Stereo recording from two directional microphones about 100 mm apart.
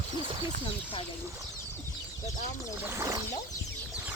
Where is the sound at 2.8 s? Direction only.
30° right (ahead or behind).